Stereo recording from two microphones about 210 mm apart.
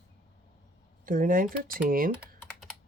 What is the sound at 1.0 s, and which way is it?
Speech, 40° right (ahead or behind).